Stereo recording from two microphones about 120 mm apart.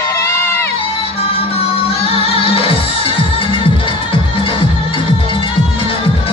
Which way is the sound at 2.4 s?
50° left (ahead or behind).